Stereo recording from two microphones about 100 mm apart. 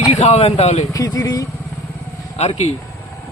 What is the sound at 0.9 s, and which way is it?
Speech, 35° left (ahead or behind).